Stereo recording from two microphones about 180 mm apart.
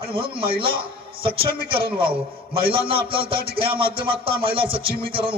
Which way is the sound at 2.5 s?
30° right (ahead or behind).